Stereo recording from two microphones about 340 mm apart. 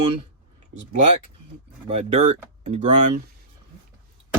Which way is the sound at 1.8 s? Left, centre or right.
Centre.